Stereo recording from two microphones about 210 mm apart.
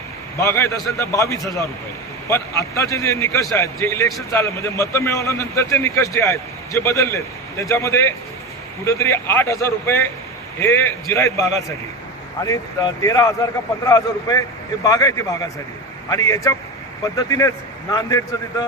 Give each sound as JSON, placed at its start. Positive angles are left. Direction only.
{"t": 0.3, "sound": "a man's voice", "side_deg": 10}